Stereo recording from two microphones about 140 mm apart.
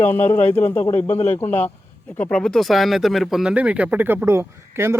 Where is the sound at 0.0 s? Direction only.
15° left (ahead or behind).